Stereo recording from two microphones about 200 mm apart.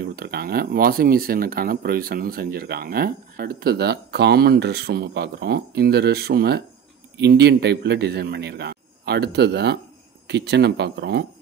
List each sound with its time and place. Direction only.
0.1 s a man's voice: 50° right (ahead or behind)